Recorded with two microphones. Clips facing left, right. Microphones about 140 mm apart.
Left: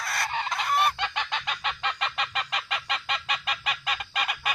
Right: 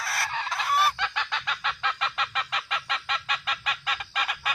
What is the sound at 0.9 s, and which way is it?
Fowl, 20° left (ahead or behind).